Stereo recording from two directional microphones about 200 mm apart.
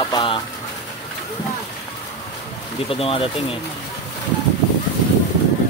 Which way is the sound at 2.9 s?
25° left (ahead or behind).